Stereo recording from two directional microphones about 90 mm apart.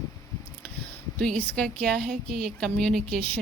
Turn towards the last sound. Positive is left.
turn(degrees=10)  # may be behind; listen again after turning